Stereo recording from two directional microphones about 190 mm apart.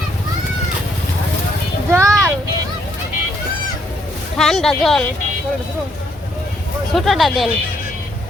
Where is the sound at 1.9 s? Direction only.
15° right (ahead or behind).